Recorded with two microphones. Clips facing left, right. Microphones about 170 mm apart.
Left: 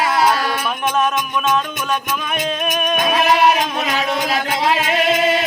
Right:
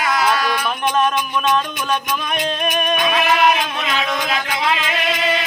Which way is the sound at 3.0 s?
45° left (ahead or behind).